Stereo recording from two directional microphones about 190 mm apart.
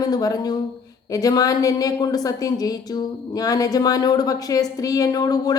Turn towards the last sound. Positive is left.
turn(degrees=20)  # may be behind; listen again after turning